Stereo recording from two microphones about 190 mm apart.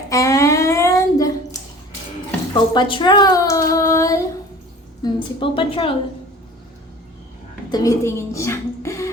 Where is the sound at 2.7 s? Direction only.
25° left (ahead or behind).